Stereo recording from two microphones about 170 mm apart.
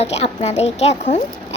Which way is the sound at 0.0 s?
40° left (ahead or behind).